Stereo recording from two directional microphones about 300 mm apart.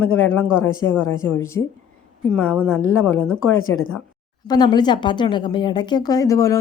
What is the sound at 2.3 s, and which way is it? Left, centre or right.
Speech, centre.